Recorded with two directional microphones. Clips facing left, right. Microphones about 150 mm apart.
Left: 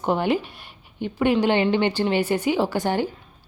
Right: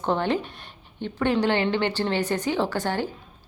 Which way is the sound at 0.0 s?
10° left (ahead or behind).